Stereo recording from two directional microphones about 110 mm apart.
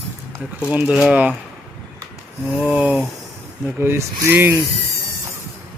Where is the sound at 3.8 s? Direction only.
25° right (ahead or behind).